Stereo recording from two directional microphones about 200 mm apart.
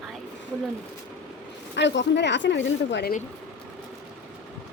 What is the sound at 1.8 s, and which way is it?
A woman's voice, 60° left (ahead or behind).